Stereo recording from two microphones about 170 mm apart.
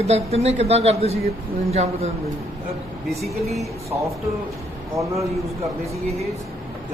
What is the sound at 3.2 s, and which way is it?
Speech, centre (ahead or behind).